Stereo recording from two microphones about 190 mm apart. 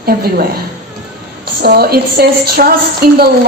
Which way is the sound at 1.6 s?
55° right (ahead or behind).